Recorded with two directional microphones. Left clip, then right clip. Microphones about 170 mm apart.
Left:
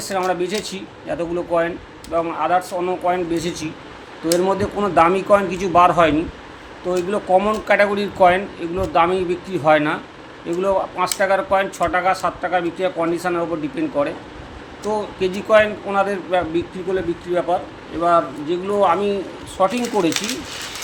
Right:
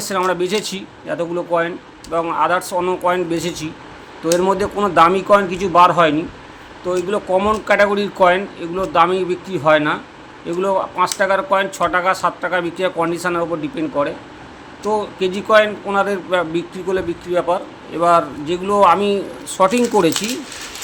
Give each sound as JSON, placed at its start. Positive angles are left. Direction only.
{"t": 0.0, "sound": "speech", "side_deg": -30}